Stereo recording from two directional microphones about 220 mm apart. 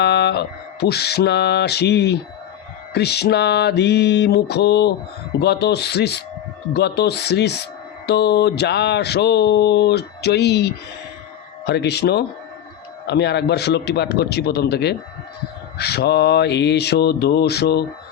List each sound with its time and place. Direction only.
0.0 s mantra: 50° left (ahead or behind)